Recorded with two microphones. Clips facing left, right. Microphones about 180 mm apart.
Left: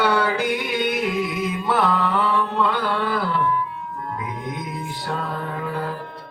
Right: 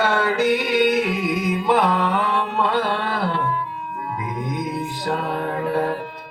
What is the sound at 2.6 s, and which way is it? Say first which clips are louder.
Carnatic music: right 1 dB; 25° right (ahead or behind).